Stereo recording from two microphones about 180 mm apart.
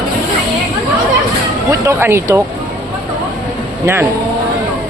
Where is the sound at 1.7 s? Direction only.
15° right (ahead or behind).